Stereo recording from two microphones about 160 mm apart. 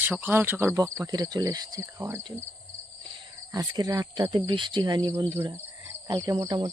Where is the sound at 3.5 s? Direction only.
25° right (ahead or behind).